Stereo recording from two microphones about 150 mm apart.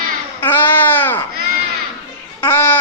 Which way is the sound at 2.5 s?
10° left (ahead or behind).